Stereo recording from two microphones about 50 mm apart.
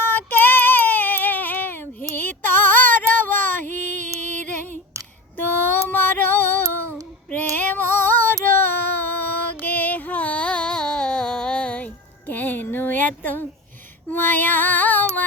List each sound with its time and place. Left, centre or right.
0.0 s child singing: left
4.4 s female singing: left
5.4 s female singing: left
7.3 s child singing: left
12.3 s a sound: left
14.1 s female singing: left